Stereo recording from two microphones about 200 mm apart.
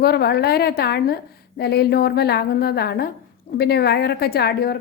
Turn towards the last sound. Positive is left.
turn(degrees=50)  # may be behind; listen again after turning